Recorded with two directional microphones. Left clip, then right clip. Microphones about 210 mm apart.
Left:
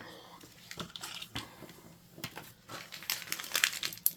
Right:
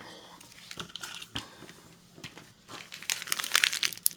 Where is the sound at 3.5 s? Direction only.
25° right (ahead or behind).